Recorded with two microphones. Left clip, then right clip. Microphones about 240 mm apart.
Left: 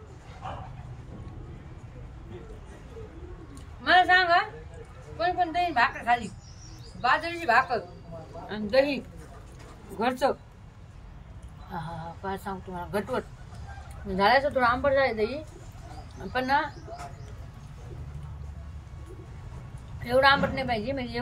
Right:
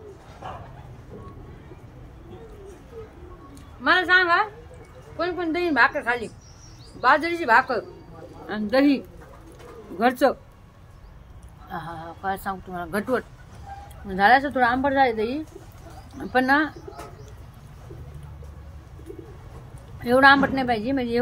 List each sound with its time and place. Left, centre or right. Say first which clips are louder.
3.8 s a woman's voice: right 2 dB; centre
12.3 s a woman's voice: right 7 dB; centre
16.3 s a woman's voice: right 6 dB; centre
20.0 s a woman's voice: right 6 dB; centre